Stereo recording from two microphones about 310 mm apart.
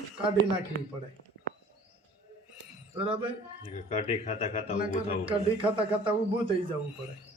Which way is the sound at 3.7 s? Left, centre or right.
Left.